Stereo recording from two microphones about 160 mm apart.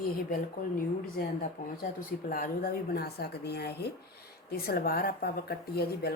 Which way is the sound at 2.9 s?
90° left.